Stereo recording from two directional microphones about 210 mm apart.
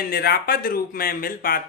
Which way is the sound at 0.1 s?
45° left (ahead or behind).